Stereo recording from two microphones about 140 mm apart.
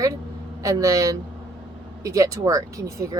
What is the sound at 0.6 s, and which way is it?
Speech, 25° right (ahead or behind).